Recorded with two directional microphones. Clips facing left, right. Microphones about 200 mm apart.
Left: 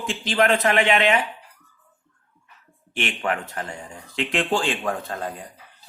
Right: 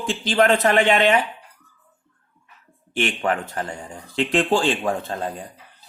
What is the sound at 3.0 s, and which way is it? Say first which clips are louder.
Speech: right 3 dB; 35° right (ahead or behind).